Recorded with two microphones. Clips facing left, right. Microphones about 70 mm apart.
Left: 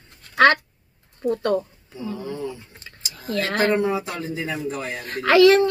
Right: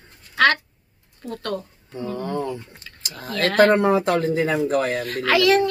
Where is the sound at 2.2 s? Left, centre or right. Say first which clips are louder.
Right 4 dB; right.